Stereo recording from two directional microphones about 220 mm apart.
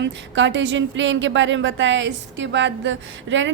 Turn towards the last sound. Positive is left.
turn(degrees=-55)  # may be behind; listen again after turning